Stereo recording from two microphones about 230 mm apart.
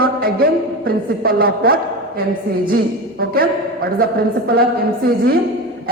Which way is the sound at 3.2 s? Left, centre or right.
Right.